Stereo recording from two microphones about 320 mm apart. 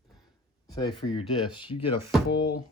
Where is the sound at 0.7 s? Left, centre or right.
Centre.